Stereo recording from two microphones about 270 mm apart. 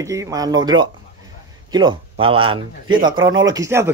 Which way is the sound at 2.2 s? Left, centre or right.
Centre.